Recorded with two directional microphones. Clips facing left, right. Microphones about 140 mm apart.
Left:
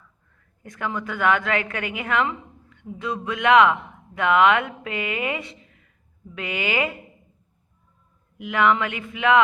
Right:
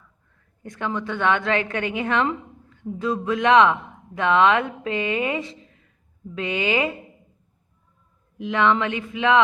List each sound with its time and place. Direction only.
0.6 s a woman's voice: 25° right (ahead or behind)
8.4 s a woman's voice: 25° right (ahead or behind)